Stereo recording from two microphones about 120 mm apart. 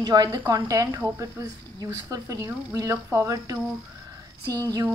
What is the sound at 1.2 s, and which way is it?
A woman's voice, 30° right (ahead or behind).